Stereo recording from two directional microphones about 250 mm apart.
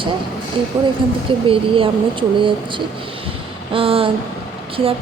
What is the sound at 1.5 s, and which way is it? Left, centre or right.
A woman's voice, right.